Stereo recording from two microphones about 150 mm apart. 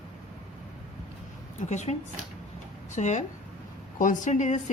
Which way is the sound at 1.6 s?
50° left (ahead or behind).